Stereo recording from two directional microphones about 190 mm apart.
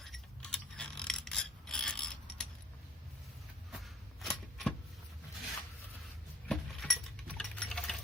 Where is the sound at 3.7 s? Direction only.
Centre (ahead or behind).